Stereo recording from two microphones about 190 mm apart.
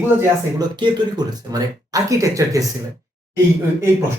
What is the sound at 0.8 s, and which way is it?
Speech, 20° right (ahead or behind).